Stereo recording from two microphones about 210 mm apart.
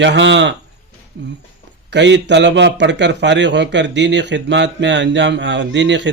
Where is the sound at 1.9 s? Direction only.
55° right (ahead or behind).